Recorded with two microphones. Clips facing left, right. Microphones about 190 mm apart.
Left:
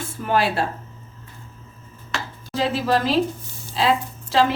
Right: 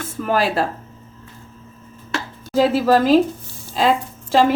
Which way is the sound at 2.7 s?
45° right (ahead or behind).